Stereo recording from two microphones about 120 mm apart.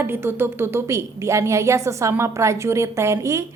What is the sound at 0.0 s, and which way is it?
A woman's voice, 20° right (ahead or behind).